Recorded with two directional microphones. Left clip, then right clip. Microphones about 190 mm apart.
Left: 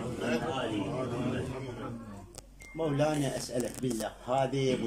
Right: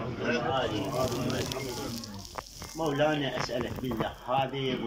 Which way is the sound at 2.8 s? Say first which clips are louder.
Right 2 dB; 20° left (ahead or behind).